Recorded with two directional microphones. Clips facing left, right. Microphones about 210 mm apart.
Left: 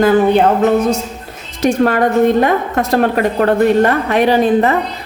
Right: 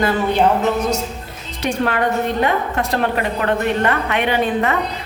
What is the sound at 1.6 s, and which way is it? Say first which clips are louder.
A woman's voice: left 7 dB; 45° left (ahead or behind).